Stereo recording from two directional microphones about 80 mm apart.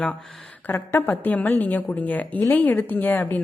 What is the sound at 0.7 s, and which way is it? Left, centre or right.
A woman's voice, left.